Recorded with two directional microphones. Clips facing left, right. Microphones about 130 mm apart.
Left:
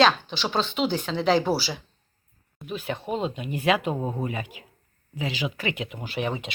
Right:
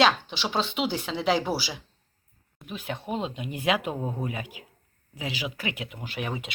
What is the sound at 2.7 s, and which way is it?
A woman's voice, 10° right (ahead or behind).